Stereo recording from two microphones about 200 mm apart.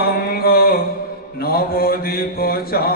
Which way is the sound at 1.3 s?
50° left (ahead or behind).